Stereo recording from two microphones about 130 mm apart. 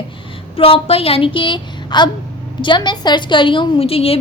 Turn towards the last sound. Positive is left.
turn(degrees=50)  # may be behind; listen again after turning